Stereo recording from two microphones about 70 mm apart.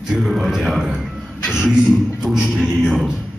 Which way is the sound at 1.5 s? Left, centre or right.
Centre.